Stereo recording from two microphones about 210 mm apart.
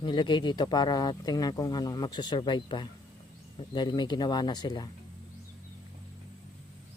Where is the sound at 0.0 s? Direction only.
20° left (ahead or behind).